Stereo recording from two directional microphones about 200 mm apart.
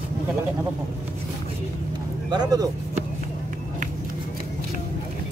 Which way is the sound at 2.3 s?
20° right (ahead or behind).